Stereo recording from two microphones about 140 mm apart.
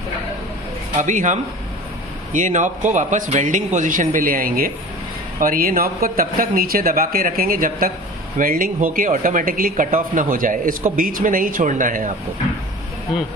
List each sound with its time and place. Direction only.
0.9 s speech: 65° right (ahead or behind)